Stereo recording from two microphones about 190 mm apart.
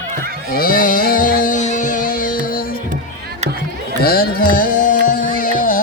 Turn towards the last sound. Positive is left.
turn(degrees=45)  # may be behind; listen again after turning